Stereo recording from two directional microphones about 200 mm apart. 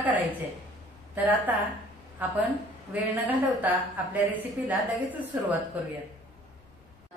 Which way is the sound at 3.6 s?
10° right (ahead or behind).